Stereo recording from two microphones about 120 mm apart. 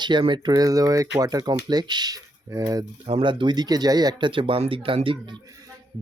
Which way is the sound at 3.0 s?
45° right (ahead or behind).